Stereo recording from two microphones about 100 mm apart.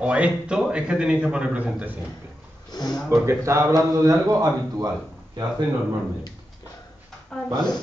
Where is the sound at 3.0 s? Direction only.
25° right (ahead or behind).